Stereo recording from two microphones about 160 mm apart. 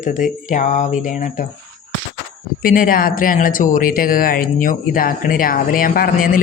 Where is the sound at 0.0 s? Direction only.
50° left (ahead or behind).